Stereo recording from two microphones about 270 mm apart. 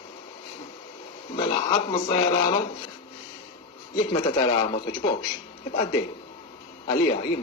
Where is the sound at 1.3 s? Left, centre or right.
Centre.